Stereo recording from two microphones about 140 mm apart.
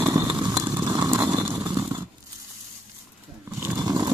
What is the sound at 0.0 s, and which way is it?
Vehicle, 20° right (ahead or behind).